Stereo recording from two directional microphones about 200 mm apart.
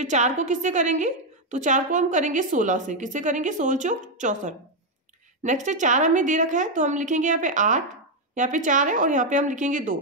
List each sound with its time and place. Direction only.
0.0 s a woman's voice: 35° right (ahead or behind)